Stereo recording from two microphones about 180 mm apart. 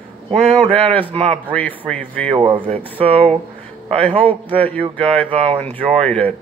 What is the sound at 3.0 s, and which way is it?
Speech, 30° right (ahead or behind).